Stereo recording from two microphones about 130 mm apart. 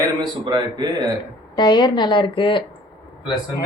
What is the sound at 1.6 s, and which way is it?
A woman's voice, 35° left (ahead or behind).